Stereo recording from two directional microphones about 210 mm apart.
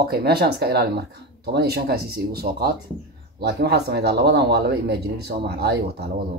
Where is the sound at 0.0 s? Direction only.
50° right (ahead or behind).